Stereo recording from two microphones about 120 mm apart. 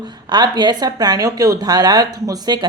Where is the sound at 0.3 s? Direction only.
40° right (ahead or behind).